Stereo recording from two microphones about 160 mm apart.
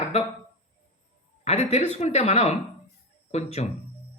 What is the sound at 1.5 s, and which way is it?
Speech, 45° left (ahead or behind).